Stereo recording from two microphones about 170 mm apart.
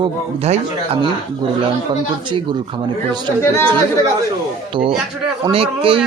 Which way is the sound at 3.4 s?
15° left (ahead or behind).